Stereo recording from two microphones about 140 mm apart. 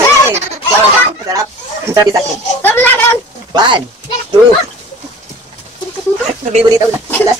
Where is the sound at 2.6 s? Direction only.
15° left (ahead or behind).